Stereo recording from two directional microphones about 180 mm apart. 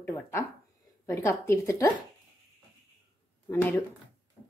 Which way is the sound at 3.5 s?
10° left (ahead or behind).